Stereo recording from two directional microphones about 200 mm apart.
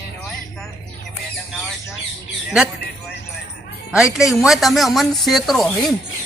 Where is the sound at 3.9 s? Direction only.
5° right (ahead or behind).